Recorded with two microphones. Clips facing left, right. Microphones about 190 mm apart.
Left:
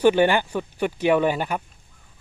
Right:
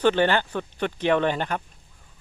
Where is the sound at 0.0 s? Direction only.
10° left (ahead or behind).